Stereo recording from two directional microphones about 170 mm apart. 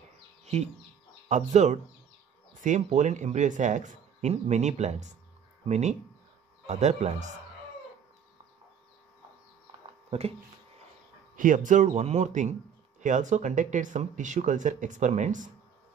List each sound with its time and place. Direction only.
1.3 s speech: 45° right (ahead or behind)
10.0 s speech: 35° right (ahead or behind)
11.3 s speech: 50° right (ahead or behind)